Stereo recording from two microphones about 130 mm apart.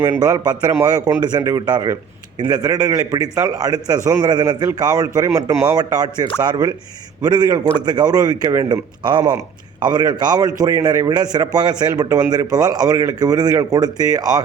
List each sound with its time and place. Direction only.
0.0 s a man's voice: 30° right (ahead or behind)
7.6 s a man's voice: 45° left (ahead or behind)
7.9 s a man's voice: 30° right (ahead or behind)